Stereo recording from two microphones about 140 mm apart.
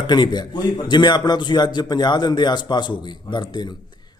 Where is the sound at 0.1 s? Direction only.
30° left (ahead or behind).